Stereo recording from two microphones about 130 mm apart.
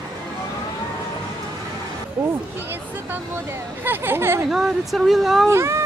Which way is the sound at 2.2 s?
15° right (ahead or behind).